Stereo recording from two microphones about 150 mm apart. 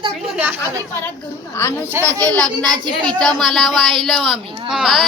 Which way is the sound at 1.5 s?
15° left (ahead or behind).